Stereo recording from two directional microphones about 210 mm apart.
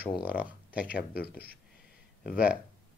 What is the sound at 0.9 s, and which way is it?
Speech, 45° left (ahead or behind).